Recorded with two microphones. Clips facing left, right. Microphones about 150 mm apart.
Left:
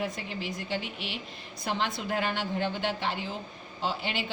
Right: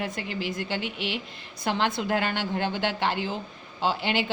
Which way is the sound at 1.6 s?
70° right (ahead or behind).